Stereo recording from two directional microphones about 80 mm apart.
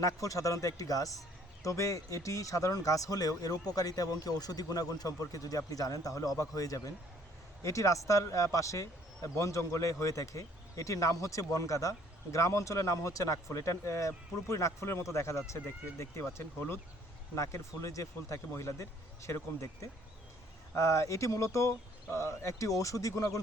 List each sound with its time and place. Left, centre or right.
0.0 s speech: left
17.3 s speech: left